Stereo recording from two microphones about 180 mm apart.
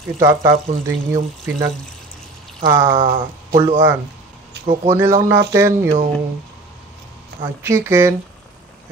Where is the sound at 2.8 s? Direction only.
30° right (ahead or behind).